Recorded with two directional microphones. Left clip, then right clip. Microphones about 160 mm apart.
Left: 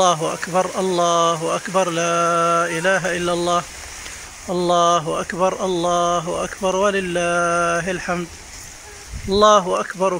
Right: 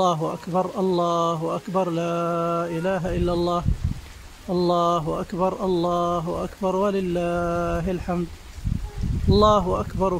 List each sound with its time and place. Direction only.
0.0 s speech: 5° right (ahead or behind)
6.2 s speech: centre (ahead or behind)
7.3 s a sound: 5° left (ahead or behind)
7.6 s speech: 10° right (ahead or behind)
9.3 s speech: 10° right (ahead or behind)